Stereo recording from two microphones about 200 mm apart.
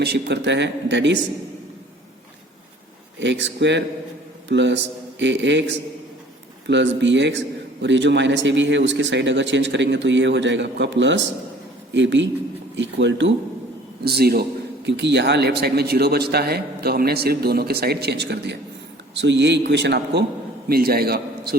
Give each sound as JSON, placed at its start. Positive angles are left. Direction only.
{"t": 0.0, "sound": "a man's voice", "side_deg": -55}
{"t": 3.2, "sound": "a man's voice", "side_deg": -65}
{"t": 14.0, "sound": "a man's voice", "side_deg": -50}